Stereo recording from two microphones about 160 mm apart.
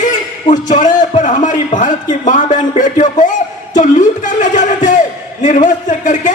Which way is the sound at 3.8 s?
50° left (ahead or behind).